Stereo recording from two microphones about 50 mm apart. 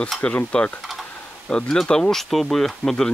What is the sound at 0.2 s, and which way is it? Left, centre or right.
Speech, left.